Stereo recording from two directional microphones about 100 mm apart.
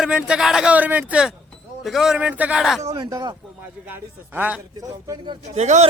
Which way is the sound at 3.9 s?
15° right (ahead or behind).